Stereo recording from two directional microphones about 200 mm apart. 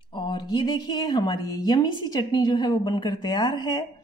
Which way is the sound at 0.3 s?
20° left (ahead or behind).